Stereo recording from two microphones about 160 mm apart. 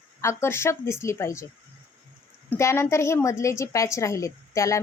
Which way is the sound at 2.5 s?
15° left (ahead or behind).